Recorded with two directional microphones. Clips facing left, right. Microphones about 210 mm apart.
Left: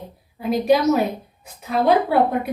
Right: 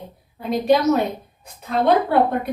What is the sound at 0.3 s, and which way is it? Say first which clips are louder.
A woman's voice: even; 5° left (ahead or behind).